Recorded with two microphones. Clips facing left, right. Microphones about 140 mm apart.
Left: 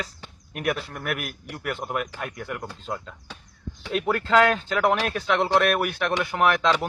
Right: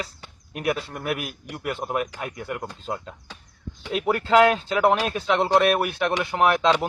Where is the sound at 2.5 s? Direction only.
20° right (ahead or behind); by 6.1 s 5° right (ahead or behind).